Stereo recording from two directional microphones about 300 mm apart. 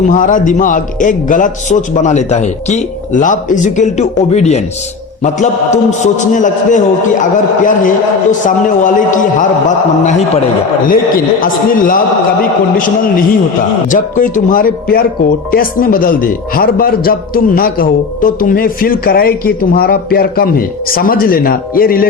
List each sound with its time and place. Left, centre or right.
0.1 s a man's voice: left
11.3 s a man's voice: left